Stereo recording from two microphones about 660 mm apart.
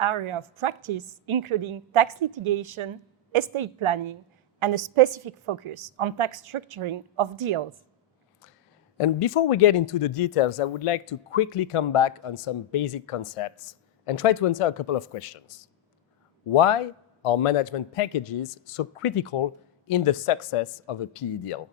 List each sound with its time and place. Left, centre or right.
0.0 s a woman's voice: right
9.0 s speech: left
16.5 s speech: left